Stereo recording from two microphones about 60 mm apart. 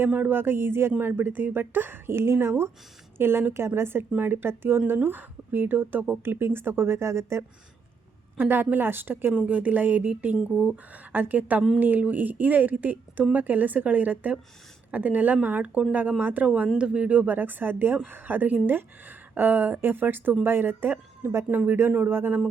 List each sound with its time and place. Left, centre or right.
0.1 s a woman's voice: right
8.4 s a woman's voice: right
9.5 s a woman's voice: right